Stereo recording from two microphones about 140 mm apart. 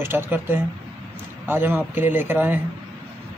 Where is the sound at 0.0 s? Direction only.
15° right (ahead or behind).